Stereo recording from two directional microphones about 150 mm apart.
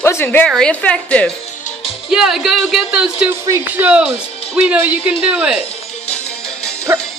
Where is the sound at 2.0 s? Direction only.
5° right (ahead or behind).